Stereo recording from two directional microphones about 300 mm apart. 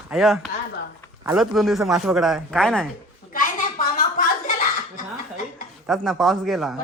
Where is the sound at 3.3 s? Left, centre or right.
Left.